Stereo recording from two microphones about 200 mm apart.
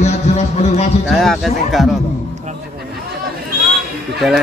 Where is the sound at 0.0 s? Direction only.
35° left (ahead or behind).